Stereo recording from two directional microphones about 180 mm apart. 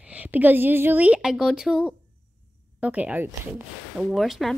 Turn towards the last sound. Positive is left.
turn(degrees=0)  # may be behind; listen again after turning